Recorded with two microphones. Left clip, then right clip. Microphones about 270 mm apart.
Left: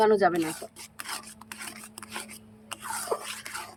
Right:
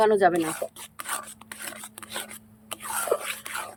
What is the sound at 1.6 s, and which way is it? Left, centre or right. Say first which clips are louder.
Filing: right 4 dB; centre.